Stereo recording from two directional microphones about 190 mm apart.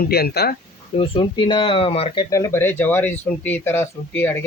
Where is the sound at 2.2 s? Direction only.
15° left (ahead or behind).